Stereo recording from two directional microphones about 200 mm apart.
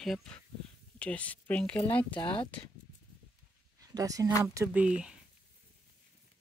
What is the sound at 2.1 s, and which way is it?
Speech, 25° left (ahead or behind).